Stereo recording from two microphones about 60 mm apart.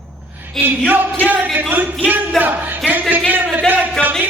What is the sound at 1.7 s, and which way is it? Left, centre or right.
Speech, right.